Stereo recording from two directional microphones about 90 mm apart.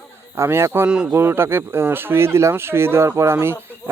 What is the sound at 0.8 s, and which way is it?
Speech, 10° right (ahead or behind).